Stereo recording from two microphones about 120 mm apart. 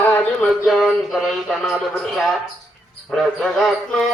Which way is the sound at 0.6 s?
Centre (ahead or behind).